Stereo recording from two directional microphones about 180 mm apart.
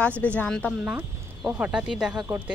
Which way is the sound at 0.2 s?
5° left (ahead or behind).